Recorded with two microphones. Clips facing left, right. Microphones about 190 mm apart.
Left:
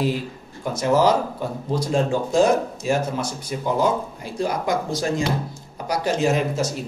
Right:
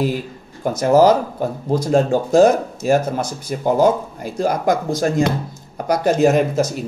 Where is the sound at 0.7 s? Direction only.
45° right (ahead or behind).